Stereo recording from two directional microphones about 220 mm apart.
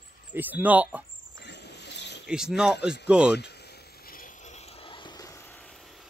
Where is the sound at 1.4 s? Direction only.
50° left (ahead or behind).